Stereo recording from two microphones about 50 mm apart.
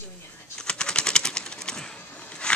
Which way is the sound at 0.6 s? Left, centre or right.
Centre.